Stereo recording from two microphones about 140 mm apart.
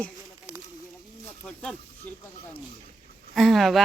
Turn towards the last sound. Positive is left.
turn(degrees=0)  # may be behind; listen again after turning